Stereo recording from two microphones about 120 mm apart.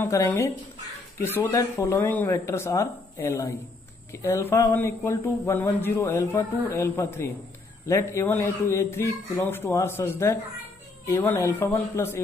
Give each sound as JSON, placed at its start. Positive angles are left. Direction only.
{"t": 0.0, "sound": "speech", "side_deg": 25}